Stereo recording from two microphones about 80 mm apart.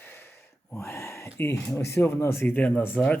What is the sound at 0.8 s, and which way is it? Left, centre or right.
A man's voice, left.